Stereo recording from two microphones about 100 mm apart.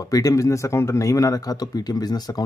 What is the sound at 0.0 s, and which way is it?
Speech, 35° left (ahead or behind).